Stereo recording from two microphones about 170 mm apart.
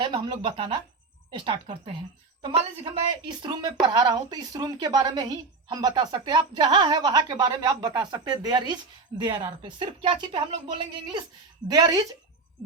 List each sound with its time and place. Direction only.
0.0 s speech: 25° right (ahead or behind)
11.7 s speech: 25° right (ahead or behind)